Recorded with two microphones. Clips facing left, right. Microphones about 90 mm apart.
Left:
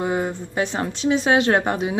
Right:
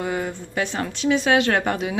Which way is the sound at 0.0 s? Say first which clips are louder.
Left 3 dB; 25° left (ahead or behind).